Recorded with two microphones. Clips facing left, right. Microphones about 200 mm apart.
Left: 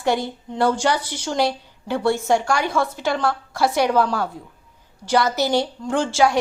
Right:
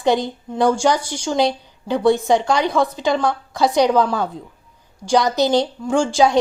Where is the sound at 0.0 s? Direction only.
20° right (ahead or behind).